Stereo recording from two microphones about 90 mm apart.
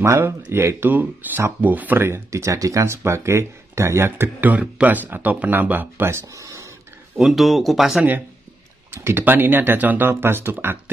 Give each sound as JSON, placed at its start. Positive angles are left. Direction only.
{"t": 0.0, "sound": "speech", "side_deg": -30}
{"t": 6.2, "sound": "a sound", "side_deg": -35}
{"t": 7.2, "sound": "speech", "side_deg": 0}
{"t": 8.9, "sound": "speech", "side_deg": -25}